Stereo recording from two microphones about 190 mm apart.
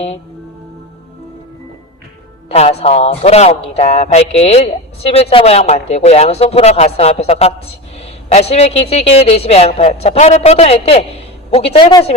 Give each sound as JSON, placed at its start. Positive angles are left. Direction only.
{"t": 2.5, "sound": "a man's voice", "side_deg": 30}